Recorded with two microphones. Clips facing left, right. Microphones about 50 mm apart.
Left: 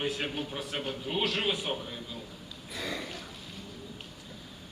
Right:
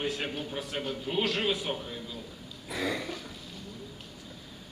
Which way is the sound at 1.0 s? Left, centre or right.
Centre.